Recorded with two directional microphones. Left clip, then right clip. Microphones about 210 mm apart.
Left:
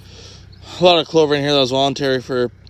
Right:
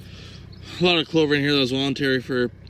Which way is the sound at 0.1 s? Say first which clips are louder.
Left 5 dB; 15° left (ahead or behind).